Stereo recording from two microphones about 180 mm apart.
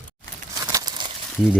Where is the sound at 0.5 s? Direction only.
20° right (ahead or behind).